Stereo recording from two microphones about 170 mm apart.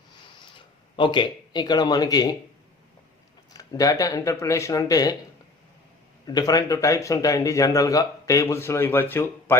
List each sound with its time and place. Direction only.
0.9 s speech: 30° left (ahead or behind)
3.5 s speech: 20° left (ahead or behind)
6.2 s speech: 20° left (ahead or behind)